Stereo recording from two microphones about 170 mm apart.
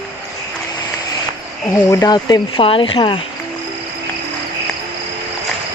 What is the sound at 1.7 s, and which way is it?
Speech, 20° left (ahead or behind).